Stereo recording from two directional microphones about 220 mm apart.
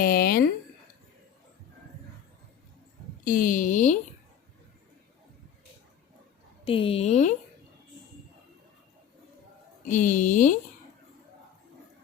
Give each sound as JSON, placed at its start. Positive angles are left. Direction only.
{"t": 0.0, "sound": "a sound", "side_deg": 40}
{"t": 3.2, "sound": "speech", "side_deg": 40}
{"t": 6.7, "sound": "speech", "side_deg": 25}
{"t": 9.8, "sound": "speech", "side_deg": 35}